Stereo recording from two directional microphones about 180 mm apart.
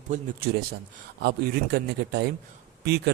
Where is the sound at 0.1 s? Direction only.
55° right (ahead or behind).